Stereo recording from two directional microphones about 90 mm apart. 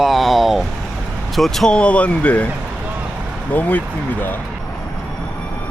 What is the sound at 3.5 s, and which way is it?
Speech, 20° left (ahead or behind).